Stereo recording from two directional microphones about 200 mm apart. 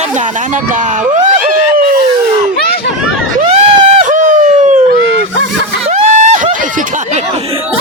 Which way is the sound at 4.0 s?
40° right (ahead or behind).